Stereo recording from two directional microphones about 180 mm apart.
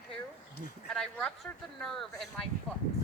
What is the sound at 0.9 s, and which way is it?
Speech, 5° left (ahead or behind).